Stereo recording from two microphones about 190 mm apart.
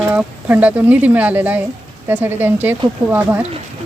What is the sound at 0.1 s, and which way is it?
Speech, 10° right (ahead or behind).